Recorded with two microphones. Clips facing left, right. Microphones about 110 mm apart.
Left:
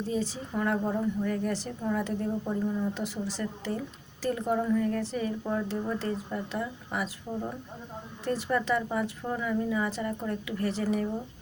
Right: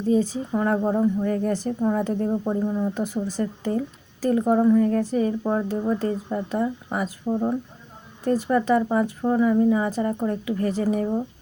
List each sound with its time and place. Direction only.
0.5 s a woman's voice: 35° right (ahead or behind)